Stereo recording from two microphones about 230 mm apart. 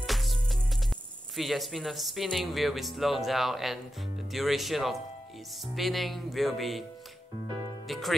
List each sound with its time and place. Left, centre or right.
0.0 s music: centre
1.3 s speech: centre
7.9 s speech: centre